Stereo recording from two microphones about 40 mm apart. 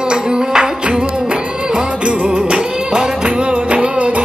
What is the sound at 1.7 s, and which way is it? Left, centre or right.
Music, right.